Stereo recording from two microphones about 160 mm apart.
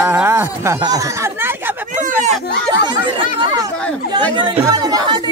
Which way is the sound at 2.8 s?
30° right (ahead or behind).